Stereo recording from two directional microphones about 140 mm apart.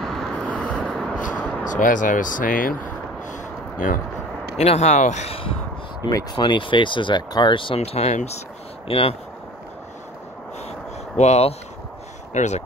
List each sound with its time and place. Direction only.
0.0 s vehicle: 5° left (ahead or behind)
1.7 s speech: 70° left (ahead or behind)
4.6 s speech: 50° left (ahead or behind)
6.0 s speech: 30° left (ahead or behind); by 8.4 s 55° left (ahead or behind)
8.8 s speech: 45° left (ahead or behind)
11.1 s speech: 50° left (ahead or behind)